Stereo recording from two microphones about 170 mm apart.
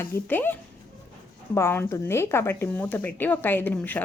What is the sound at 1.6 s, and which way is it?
Speech, 15° left (ahead or behind).